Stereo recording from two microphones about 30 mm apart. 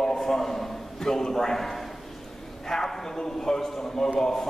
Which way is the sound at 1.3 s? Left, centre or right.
Centre.